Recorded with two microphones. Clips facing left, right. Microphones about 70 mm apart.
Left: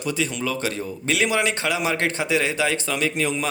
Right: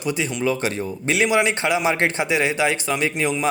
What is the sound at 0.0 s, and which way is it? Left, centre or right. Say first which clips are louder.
A man's voice: right 3 dB; centre.